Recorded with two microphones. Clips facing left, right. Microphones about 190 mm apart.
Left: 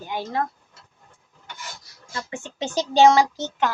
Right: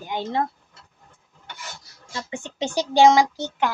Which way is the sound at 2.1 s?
15° right (ahead or behind).